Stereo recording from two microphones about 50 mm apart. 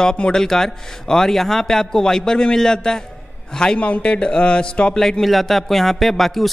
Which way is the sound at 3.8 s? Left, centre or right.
Left.